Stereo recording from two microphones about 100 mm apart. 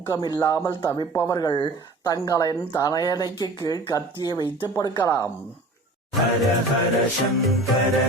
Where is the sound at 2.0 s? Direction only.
40° left (ahead or behind).